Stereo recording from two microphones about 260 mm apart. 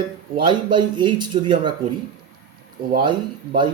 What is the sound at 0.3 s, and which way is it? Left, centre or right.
Speech, centre.